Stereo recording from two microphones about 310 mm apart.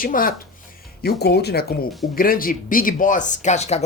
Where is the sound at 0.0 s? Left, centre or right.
Left.